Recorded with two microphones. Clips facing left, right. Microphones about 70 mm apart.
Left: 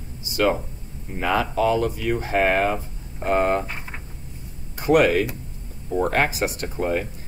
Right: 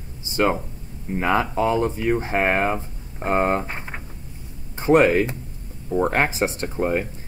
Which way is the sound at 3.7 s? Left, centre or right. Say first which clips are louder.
Right 2 dB; right.